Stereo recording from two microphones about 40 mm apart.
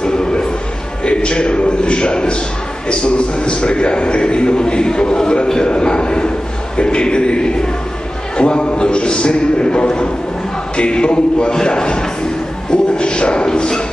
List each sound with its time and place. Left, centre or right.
0.0 s a sound: left
1.0 s a man's voice: left
12.7 s dog: left